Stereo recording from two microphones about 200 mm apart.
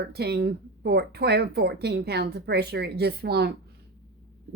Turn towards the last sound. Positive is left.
turn(degrees=-50)  # may be behind; listen again after turning